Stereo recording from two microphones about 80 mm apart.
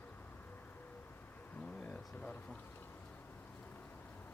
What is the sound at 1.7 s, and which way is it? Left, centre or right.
Pigeon, centre.